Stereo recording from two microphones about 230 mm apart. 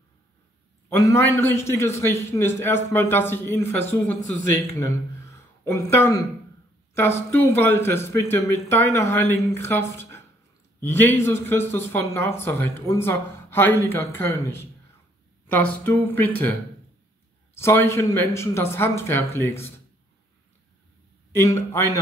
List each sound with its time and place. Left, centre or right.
1.0 s speech: centre
17.6 s speech: centre
21.3 s speech: centre